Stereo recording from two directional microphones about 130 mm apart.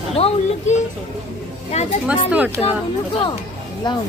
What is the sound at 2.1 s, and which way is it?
Speech, 10° right (ahead or behind).